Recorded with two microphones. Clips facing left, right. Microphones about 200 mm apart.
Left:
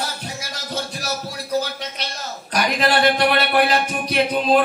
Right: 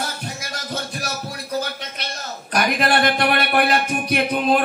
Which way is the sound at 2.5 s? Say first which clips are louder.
Even; 55° right (ahead or behind).